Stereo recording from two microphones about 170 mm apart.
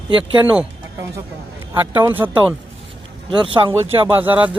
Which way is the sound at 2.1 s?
10° right (ahead or behind).